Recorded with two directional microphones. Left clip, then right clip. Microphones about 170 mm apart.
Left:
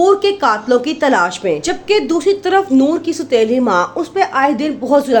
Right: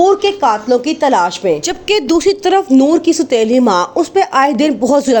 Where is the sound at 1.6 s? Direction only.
45° right (ahead or behind).